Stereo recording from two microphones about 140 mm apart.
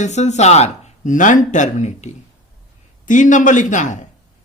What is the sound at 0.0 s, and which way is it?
Speech, 55° left (ahead or behind).